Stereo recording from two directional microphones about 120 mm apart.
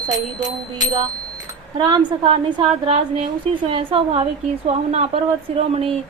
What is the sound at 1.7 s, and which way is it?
A woman's voice, 40° right (ahead or behind).